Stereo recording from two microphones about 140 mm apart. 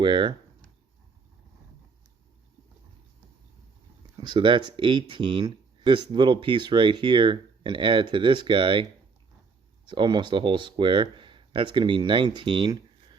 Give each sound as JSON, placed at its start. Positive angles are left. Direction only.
{"t": 0.0, "sound": "speech", "side_deg": -35}
{"t": 4.2, "sound": "speech", "side_deg": -35}